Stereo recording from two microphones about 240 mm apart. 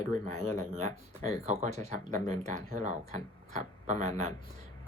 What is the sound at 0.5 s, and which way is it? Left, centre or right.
Speech, right.